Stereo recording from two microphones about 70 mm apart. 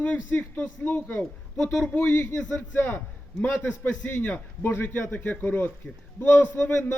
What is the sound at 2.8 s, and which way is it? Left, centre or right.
A man's voice, left.